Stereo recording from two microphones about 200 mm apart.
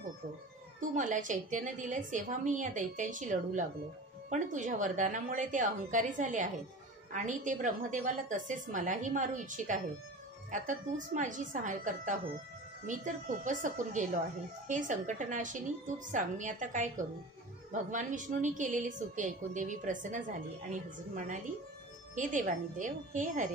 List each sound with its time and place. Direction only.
0.7 s a woman's voice: 40° right (ahead or behind)
22.1 s a woman's voice: 40° right (ahead or behind)